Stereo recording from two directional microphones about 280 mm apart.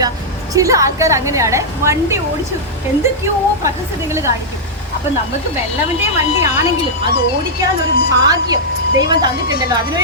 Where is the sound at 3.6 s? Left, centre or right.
Centre.